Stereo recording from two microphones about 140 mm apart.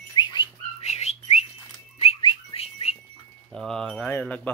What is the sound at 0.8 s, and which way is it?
Whistling, 50° left (ahead or behind).